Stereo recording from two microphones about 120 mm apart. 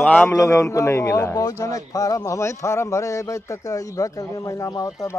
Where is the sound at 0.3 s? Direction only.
25° left (ahead or behind).